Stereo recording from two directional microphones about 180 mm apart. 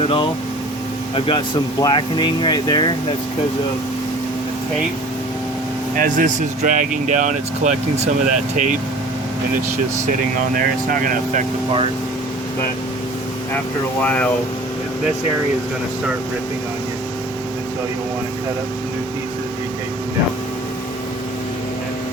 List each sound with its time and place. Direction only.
0.0 s air conditioning: 30° left (ahead or behind)
1.1 s speech: 25° left (ahead or behind)
6.0 s speech: 45° right (ahead or behind)
10.6 s speech: 50° right (ahead or behind)
14.0 s speech: 10° left (ahead or behind)